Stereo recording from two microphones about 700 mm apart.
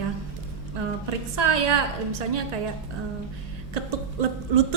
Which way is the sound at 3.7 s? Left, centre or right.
Right.